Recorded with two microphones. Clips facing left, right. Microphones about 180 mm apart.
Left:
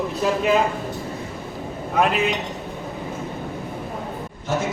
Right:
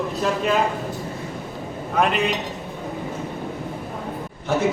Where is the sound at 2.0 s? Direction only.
Centre (ahead or behind).